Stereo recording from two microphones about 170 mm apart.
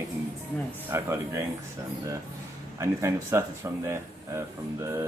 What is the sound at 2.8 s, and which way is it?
Speech, 15° right (ahead or behind).